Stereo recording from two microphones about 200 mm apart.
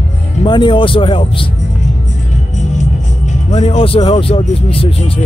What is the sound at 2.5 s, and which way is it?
Speech, 35° left (ahead or behind).